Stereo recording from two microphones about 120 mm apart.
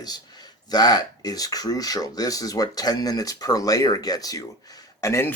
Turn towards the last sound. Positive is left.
turn(degrees=25)  # may be behind; listen again after turning